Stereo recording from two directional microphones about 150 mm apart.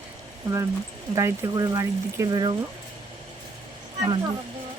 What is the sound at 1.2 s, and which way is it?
Speech, 20° right (ahead or behind).